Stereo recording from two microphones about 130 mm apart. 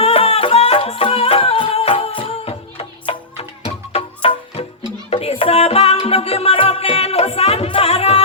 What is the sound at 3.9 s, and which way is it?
Music, 50° left (ahead or behind).